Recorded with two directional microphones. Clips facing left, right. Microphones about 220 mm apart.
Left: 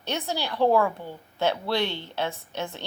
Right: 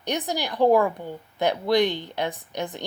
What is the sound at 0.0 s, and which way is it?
A woman's voice, 15° right (ahead or behind).